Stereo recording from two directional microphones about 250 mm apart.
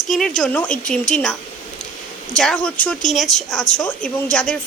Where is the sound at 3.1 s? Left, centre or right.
Left.